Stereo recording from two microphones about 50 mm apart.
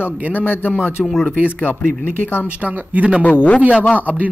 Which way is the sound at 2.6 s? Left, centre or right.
Right.